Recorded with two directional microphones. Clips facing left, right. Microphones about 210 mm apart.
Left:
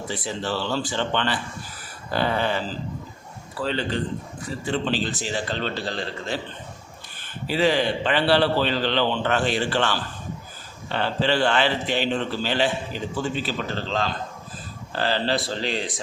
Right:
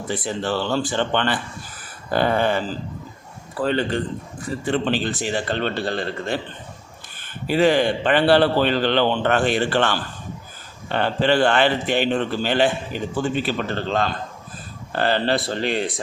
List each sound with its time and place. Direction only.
0.1 s a man's voice: 55° right (ahead or behind)
7.4 s a man's voice: 50° right (ahead or behind)